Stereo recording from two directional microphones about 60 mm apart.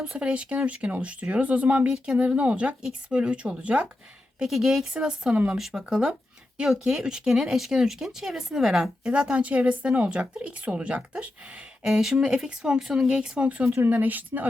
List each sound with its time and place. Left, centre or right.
0.1 s speech: centre
4.4 s speech: centre
11.9 s speech: centre; by 14.4 s right